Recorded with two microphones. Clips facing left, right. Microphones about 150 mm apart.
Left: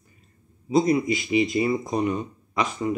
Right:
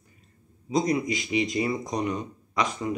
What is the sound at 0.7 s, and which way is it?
Speech, 5° left (ahead or behind).